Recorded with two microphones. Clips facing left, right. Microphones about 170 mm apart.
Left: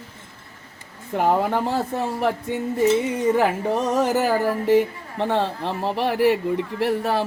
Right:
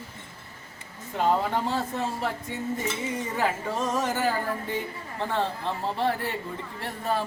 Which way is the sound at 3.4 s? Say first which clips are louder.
Left 7 dB; 65° left (ahead or behind).